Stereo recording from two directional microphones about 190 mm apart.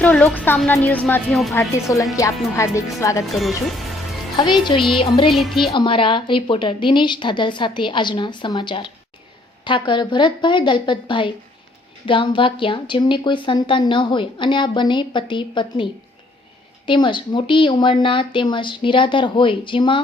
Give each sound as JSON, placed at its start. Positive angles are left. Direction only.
{"t": 0.0, "sound": "a woman's voice", "side_deg": 5}
{"t": 1.5, "sound": "a woman's voice", "side_deg": 15}
{"t": 3.3, "sound": "speech", "side_deg": 0}
{"t": 4.4, "sound": "a woman's voice", "side_deg": 25}
{"t": 5.3, "sound": "speech", "side_deg": 0}
{"t": 5.7, "sound": "a woman's voice", "side_deg": 25}